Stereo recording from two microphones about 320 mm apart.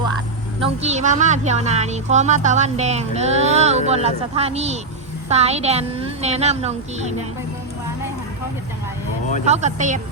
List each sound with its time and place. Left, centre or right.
0.6 s a woman's voice: centre
9.5 s a woman's voice: right